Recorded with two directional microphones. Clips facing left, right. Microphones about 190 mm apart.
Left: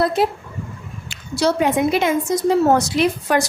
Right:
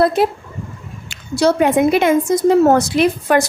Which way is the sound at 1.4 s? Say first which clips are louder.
Right 4 dB; 50° right (ahead or behind).